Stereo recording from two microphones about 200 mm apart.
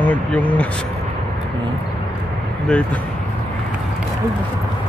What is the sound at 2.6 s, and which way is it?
Speech, 5° left (ahead or behind).